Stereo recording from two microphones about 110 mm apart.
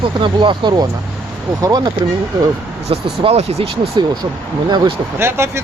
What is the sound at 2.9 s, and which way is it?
Speech, 70° right (ahead or behind).